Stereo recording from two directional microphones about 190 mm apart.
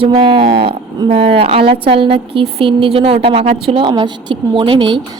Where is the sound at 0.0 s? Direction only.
30° right (ahead or behind).